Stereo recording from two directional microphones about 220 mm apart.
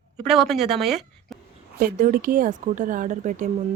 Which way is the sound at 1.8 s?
40° right (ahead or behind).